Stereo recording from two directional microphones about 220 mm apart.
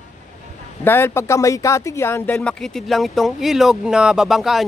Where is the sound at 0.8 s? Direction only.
10° left (ahead or behind).